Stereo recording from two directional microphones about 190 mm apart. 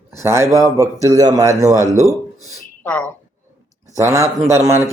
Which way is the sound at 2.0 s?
15° left (ahead or behind).